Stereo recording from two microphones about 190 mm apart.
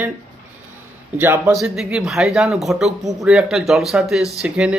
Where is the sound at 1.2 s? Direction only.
10° right (ahead or behind).